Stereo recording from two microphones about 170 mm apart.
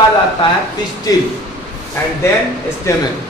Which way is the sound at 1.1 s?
20° left (ahead or behind).